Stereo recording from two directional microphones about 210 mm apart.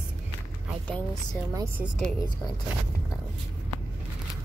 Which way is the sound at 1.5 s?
15° right (ahead or behind).